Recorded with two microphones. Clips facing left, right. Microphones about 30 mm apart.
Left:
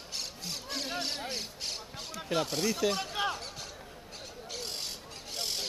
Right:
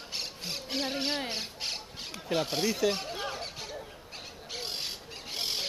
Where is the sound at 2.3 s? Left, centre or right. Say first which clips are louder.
Right 1 dB; centre.